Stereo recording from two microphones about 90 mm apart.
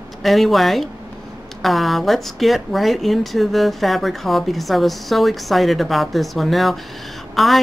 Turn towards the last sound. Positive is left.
turn(degrees=0)  # may be behind; listen again after turning